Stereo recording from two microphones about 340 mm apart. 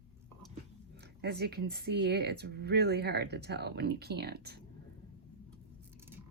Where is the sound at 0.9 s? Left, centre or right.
Right.